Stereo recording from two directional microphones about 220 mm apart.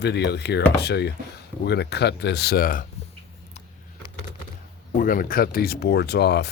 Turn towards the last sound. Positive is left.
turn(degrees=50)  # may be behind; listen again after turning